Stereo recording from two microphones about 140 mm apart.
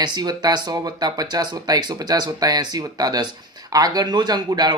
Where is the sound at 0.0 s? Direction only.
30° right (ahead or behind).